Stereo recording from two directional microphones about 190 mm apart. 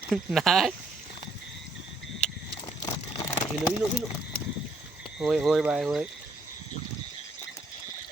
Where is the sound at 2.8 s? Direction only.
20° left (ahead or behind).